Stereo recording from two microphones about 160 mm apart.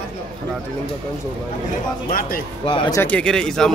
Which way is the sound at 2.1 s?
65° left (ahead or behind).